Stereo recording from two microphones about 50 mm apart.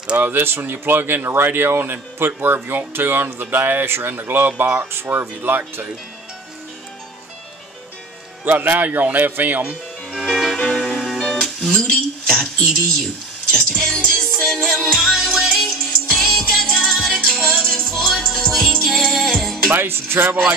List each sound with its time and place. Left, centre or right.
0.2 s speech: right
8.5 s speech: right
10.1 s music: centre
10.5 s music: centre
11.7 s speech: centre
13.5 s music: centre
14.9 s music: centre
17.5 s music: centre
19.7 s speech: right